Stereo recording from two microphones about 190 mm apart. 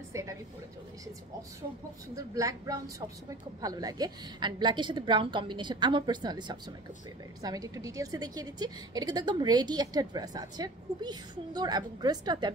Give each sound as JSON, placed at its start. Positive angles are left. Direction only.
{"t": 0.1, "sound": "a woman's voice", "side_deg": -15}
{"t": 2.1, "sound": "a woman's voice", "side_deg": -20}